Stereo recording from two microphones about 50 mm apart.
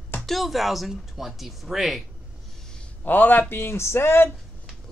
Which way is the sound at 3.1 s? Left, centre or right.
Left.